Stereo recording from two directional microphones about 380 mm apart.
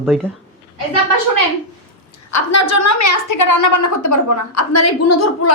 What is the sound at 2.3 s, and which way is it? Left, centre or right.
A woman's voice, left.